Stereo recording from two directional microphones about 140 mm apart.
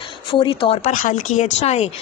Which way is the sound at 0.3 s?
35° left (ahead or behind).